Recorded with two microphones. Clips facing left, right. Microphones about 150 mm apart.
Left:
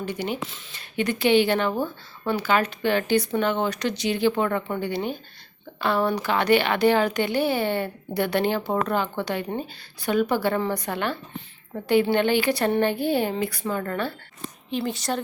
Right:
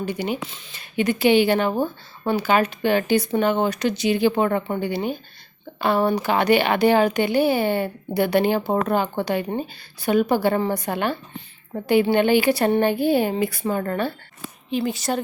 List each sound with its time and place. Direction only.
0.0 s speech: 10° right (ahead or behind)
0.3 s speech: centre (ahead or behind)
4.4 s speech: 25° right (ahead or behind)
4.8 s speech: 10° right (ahead or behind)
14.7 s speech: 5° right (ahead or behind)